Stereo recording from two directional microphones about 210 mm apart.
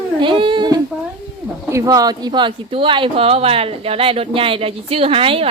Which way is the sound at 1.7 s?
15° right (ahead or behind).